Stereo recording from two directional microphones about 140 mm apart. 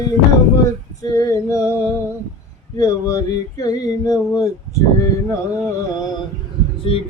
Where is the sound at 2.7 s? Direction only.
25° left (ahead or behind).